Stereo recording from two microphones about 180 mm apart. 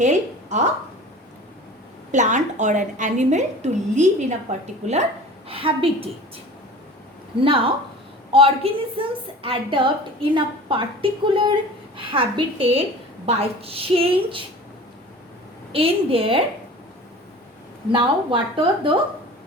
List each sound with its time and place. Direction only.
0.0 s a woman's voice: 40° right (ahead or behind)
2.1 s a woman's voice: 40° right (ahead or behind)
7.4 s a woman's voice: 30° right (ahead or behind)
15.7 s a woman's voice: 30° right (ahead or behind)
17.9 s a woman's voice: 25° right (ahead or behind)